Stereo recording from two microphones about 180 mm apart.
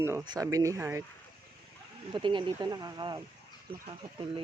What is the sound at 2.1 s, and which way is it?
Speech, 25° right (ahead or behind).